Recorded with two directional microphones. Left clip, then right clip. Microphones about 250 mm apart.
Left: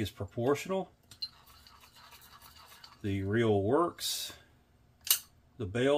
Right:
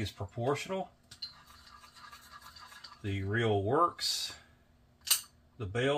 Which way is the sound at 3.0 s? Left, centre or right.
Left.